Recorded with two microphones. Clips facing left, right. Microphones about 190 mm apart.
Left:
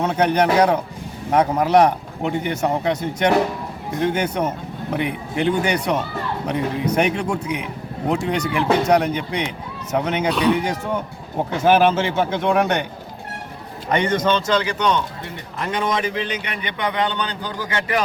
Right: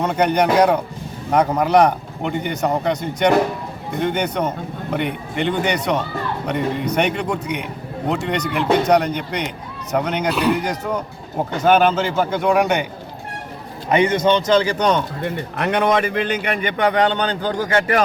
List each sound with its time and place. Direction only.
0.0 s speech: 5° left (ahead or behind)
13.9 s a man's voice: 10° right (ahead or behind)
14.6 s a man's voice: 35° right (ahead or behind)
15.5 s a man's voice: 65° right (ahead or behind); by 18.0 s 45° right (ahead or behind)